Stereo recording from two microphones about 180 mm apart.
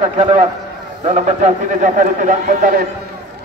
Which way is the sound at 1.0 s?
45° right (ahead or behind).